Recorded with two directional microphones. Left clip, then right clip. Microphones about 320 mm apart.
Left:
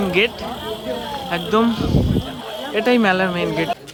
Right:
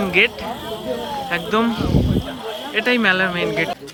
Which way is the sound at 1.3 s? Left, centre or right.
Centre.